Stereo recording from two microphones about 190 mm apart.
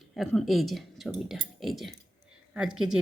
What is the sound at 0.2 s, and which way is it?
Speech, centre (ahead or behind).